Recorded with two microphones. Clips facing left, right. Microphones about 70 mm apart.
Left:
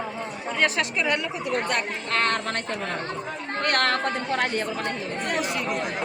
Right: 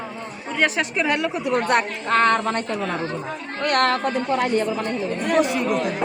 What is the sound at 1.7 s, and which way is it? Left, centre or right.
Speech, right.